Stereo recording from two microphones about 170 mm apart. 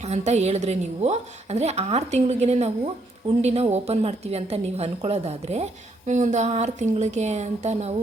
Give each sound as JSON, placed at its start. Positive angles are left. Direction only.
{"t": 0.0, "sound": "a woman's voice", "side_deg": -40}